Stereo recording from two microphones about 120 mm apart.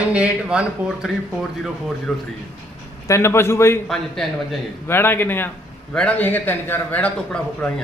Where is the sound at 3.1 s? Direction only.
20° left (ahead or behind).